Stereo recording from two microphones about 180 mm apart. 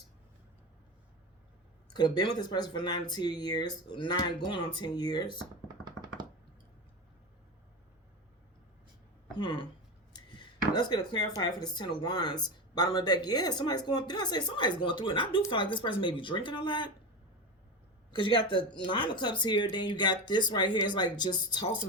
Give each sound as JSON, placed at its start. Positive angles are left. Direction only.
{"t": 1.9, "sound": "speech", "side_deg": 25}
{"t": 9.3, "sound": "speech", "side_deg": 30}
{"t": 10.1, "sound": "a sound", "side_deg": 25}
{"t": 10.7, "sound": "speech", "side_deg": 25}
{"t": 18.1, "sound": "speech", "side_deg": 25}